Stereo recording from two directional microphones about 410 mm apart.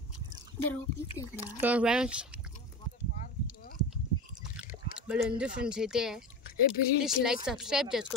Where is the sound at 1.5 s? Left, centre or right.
Centre.